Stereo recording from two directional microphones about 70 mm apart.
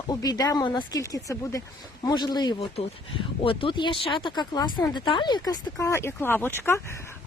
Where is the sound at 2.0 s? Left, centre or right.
Left.